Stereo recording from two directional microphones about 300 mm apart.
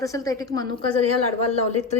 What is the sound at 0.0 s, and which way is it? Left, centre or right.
Speech, centre.